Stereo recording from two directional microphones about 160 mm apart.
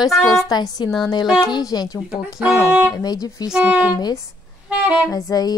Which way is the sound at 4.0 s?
25° left (ahead or behind).